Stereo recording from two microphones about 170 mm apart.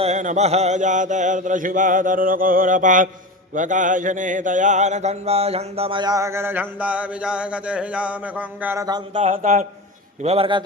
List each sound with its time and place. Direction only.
0.0 s mantra: 45° right (ahead or behind); by 9.2 s 25° right (ahead or behind)
9.2 s mantra: 45° right (ahead or behind)
10.2 s a man's voice: 35° right (ahead or behind)